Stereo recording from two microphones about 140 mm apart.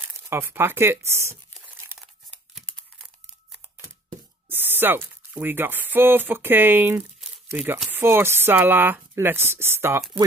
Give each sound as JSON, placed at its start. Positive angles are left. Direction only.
{"t": 0.0, "sound": "speech", "side_deg": -15}
{"t": 2.5, "sound": "tearing", "side_deg": 5}
{"t": 4.5, "sound": "speech", "side_deg": -15}